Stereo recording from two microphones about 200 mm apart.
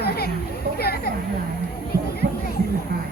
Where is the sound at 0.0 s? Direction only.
55° left (ahead or behind).